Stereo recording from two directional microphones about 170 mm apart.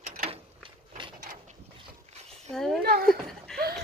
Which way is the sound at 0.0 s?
55° right (ahead or behind).